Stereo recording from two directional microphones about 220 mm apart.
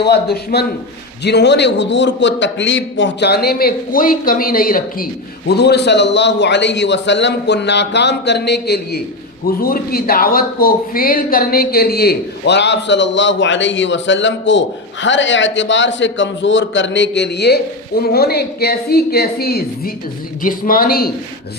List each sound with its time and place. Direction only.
0.0 s speech: 45° left (ahead or behind)